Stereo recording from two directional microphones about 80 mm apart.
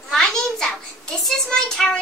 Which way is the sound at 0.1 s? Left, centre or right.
Centre.